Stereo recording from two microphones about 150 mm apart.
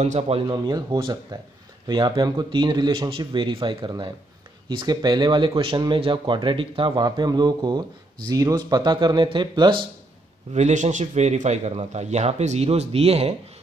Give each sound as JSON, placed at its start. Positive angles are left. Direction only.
{"t": 0.0, "sound": "a man's voice", "side_deg": -50}
{"t": 0.5, "sound": "a man's voice", "side_deg": -25}
{"t": 10.5, "sound": "a man's voice", "side_deg": -55}